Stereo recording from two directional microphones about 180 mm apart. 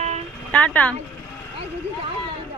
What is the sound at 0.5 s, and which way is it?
Speech, 5° left (ahead or behind).